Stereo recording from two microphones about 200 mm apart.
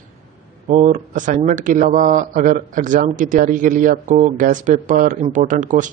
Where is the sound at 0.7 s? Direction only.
40° right (ahead or behind).